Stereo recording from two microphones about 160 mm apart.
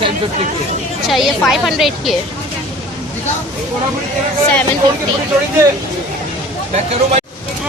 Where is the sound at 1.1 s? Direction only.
Centre (ahead or behind).